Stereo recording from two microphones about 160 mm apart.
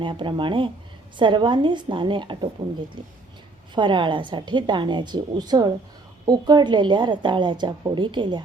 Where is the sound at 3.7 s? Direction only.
30° right (ahead or behind).